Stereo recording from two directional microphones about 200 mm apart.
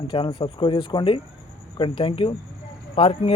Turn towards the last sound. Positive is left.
turn(degrees=30)  # may be behind; listen again after turning